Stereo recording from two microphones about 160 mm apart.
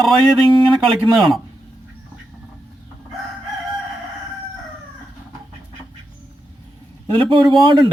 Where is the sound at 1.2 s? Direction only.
Centre (ahead or behind).